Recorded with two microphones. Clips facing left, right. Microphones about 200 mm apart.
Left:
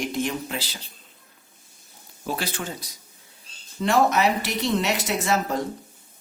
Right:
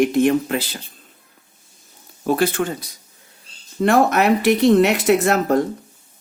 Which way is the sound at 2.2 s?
55° right (ahead or behind).